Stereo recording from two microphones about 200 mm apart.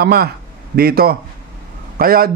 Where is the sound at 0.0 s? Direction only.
55° right (ahead or behind).